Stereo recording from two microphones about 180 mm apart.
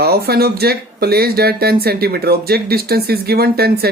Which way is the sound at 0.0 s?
60° right (ahead or behind).